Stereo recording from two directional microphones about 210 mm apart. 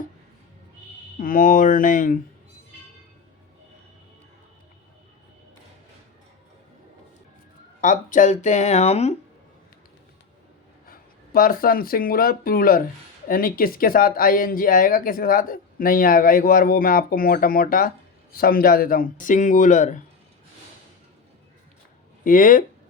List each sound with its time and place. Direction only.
1.2 s speech: 40° left (ahead or behind)
7.8 s speech: 35° left (ahead or behind)
10.8 s speech: 45° left (ahead or behind)
22.2 s speech: 40° left (ahead or behind)